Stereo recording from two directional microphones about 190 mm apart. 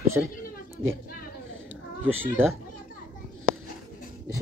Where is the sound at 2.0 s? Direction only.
10° right (ahead or behind).